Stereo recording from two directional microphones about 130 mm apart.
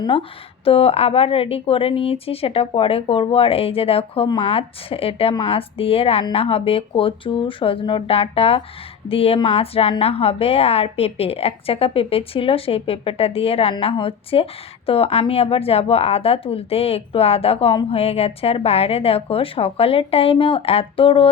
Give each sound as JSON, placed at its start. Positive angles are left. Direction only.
{"t": 0.0, "sound": "a woman's voice", "side_deg": 40}